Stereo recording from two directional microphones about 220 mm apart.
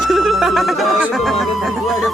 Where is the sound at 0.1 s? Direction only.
Centre (ahead or behind).